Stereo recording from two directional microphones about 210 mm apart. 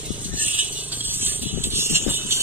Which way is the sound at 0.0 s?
10° right (ahead or behind).